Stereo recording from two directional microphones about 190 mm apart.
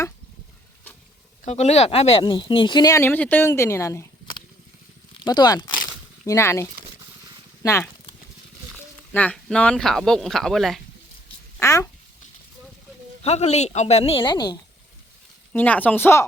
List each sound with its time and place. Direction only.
1.5 s speech: 35° left (ahead or behind); by 7.9 s 15° left (ahead or behind)
9.1 s speech: 5° left (ahead or behind)
11.6 s speech: 15° left (ahead or behind)
13.2 s a woman's voice: 35° left (ahead or behind)
15.5 s speech: 10° left (ahead or behind)